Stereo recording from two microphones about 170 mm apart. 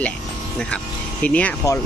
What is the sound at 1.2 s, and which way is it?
Speech, 10° left (ahead or behind).